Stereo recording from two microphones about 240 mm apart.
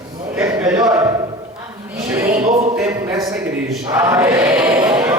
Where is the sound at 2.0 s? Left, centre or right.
Centre.